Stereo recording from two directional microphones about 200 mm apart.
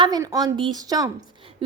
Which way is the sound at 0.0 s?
15° right (ahead or behind).